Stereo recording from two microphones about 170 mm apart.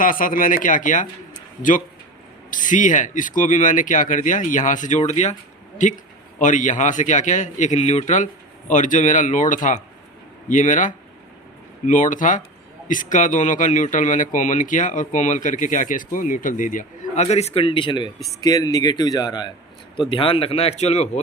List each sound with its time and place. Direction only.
0.0 s speech: 55° left (ahead or behind)
2.5 s speech: 50° left (ahead or behind)